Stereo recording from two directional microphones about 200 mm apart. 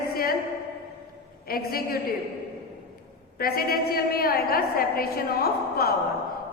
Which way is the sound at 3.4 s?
50° left (ahead or behind).